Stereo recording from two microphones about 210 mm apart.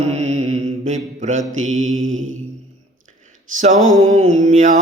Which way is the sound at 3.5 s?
35° right (ahead or behind).